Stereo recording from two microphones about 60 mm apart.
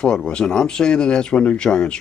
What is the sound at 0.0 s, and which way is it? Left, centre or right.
Speech, centre.